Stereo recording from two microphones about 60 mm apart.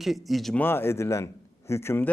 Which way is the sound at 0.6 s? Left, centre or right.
Left.